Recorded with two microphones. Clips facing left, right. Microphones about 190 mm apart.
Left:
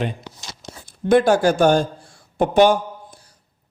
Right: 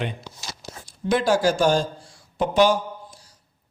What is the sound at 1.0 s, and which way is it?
A man's voice, 55° left (ahead or behind).